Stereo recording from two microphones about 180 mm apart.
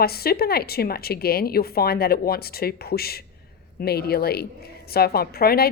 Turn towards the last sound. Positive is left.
turn(degrees=55)  # may be behind; listen again after turning